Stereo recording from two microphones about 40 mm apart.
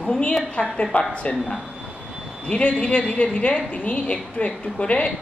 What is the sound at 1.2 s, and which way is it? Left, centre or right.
Speech, left.